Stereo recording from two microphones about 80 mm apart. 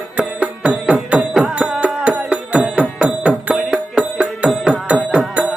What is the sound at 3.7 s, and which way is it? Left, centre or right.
Music, centre.